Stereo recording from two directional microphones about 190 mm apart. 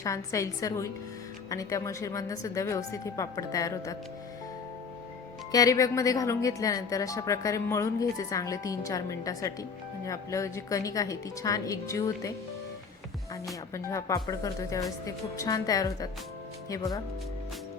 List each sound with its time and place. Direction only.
0.0 s a woman's voice: 15° left (ahead or behind)
5.5 s a woman's voice: 20° left (ahead or behind)
13.7 s a woman's voice: 15° left (ahead or behind)